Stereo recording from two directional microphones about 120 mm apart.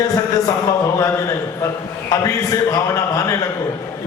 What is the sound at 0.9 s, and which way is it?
A man's voice, 30° left (ahead or behind).